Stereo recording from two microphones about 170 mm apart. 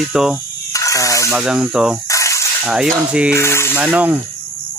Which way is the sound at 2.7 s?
5° right (ahead or behind).